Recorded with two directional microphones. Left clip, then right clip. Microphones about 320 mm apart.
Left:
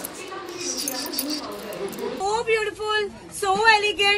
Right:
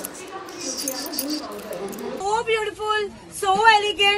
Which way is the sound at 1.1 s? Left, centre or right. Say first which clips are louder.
Right 1 dB; centre.